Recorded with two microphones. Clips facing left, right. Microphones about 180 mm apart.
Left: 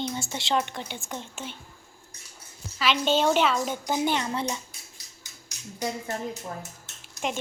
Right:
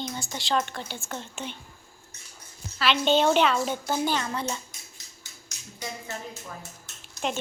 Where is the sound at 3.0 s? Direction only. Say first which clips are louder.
Right 2 dB; 5° left (ahead or behind).